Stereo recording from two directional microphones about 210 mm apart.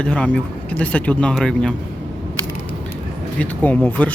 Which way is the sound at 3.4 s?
10° left (ahead or behind).